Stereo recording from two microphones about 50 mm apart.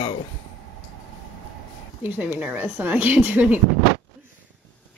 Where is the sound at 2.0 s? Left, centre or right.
Right.